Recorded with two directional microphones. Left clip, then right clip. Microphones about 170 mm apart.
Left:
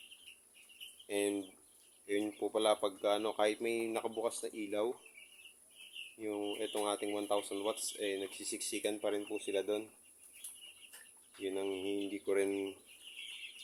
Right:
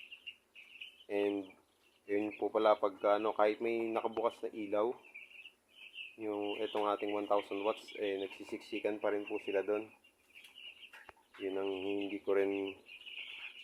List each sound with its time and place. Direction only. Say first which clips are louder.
1.0 s speech: right 1 dB; 20° left (ahead or behind)
6.1 s speech: right 1 dB; 15° left (ahead or behind)
11.4 s speech: right 1 dB; 20° left (ahead or behind)